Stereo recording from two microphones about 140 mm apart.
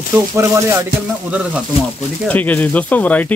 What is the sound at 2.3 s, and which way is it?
Speech, 10° left (ahead or behind).